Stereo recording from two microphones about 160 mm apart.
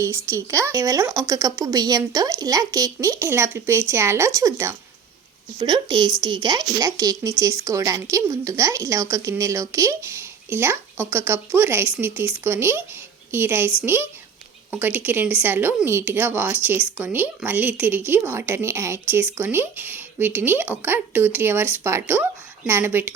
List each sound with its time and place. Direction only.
0.0 s speech: 20° right (ahead or behind)